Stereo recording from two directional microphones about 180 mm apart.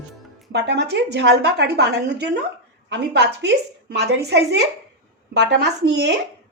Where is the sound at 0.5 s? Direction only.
70° right (ahead or behind).